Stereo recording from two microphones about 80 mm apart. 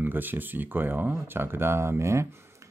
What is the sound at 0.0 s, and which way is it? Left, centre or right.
Speech, right.